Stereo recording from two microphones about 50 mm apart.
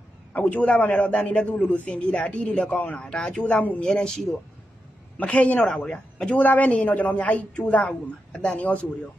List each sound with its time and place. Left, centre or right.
0.3 s a man's voice: left
3.1 s a man's voice: centre
3.8 s speech: centre
5.2 s a man's voice: left
5.6 s speech: centre
5.9 s speech: left
6.3 s a woman's voice: left
7.8 s a man's voice: left